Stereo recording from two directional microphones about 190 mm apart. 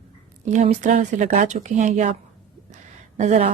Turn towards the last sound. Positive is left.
turn(degrees=-40)  # may be behind; listen again after turning